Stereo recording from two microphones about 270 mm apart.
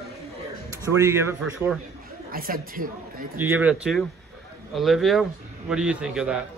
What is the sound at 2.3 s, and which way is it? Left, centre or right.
Speech, right.